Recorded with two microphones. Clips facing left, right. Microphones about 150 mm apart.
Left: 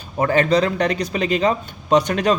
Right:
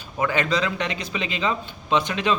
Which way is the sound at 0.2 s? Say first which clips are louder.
Left 6 dB; 40° left (ahead or behind).